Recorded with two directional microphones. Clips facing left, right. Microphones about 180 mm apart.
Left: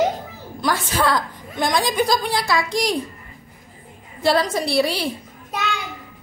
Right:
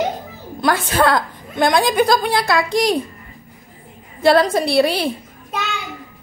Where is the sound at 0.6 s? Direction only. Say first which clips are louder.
Right 5 dB; 60° right (ahead or behind).